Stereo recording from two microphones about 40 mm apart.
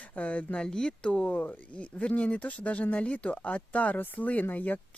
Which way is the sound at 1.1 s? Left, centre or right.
Left.